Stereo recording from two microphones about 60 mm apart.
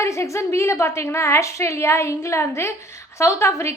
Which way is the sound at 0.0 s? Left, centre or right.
Left.